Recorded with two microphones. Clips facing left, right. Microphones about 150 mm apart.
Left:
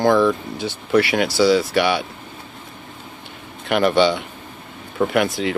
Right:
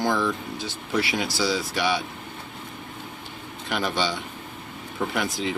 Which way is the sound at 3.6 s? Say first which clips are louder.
Left 10 dB; 65° left (ahead or behind).